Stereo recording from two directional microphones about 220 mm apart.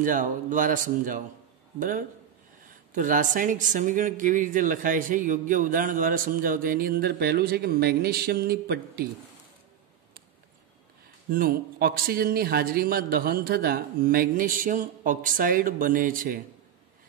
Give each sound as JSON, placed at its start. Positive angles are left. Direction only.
{"t": 0.0, "sound": "speech", "side_deg": -35}
{"t": 11.2, "sound": "speech", "side_deg": -40}